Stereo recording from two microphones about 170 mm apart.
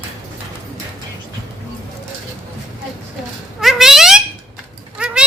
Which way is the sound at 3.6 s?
Centre (ahead or behind).